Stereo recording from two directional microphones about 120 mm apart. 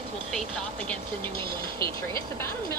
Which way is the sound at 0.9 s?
15° left (ahead or behind).